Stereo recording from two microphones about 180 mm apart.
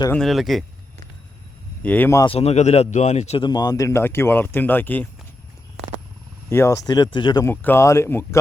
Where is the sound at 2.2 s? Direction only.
35° left (ahead or behind); by 5.0 s 10° left (ahead or behind).